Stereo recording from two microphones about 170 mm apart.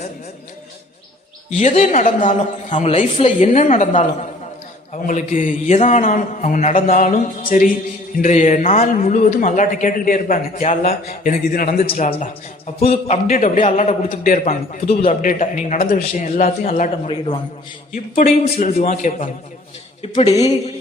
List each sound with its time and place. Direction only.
1.5 s speech: 40° left (ahead or behind)
11.9 s a man's voice: 40° left (ahead or behind)
13.2 s speech: 50° left (ahead or behind)
14.1 s speech: 55° left (ahead or behind)
18.2 s a man's voice: 45° left (ahead or behind)